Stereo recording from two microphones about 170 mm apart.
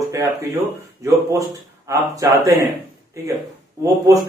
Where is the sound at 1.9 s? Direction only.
20° right (ahead or behind).